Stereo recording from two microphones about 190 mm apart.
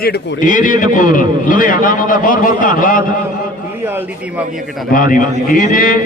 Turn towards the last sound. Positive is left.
turn(degrees=45)  # may be behind; listen again after turning